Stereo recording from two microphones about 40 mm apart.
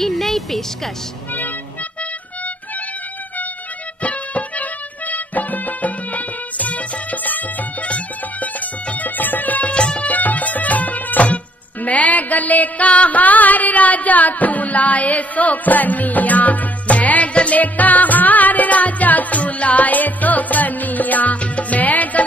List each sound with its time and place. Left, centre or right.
0.0 s speech: centre
4.0 s music: left
9.7 s music: left
10.0 s music: left
17.3 s music: left
17.6 s music: left